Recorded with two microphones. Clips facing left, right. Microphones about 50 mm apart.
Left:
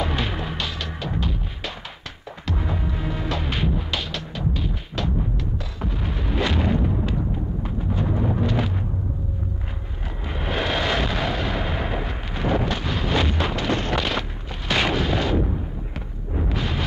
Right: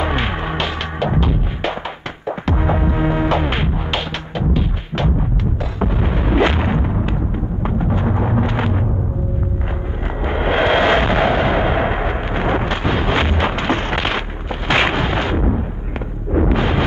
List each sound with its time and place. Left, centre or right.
0.0 s music: right
7.6 s a sound: right
10.2 s artillery fire: right
16.3 s explosion: right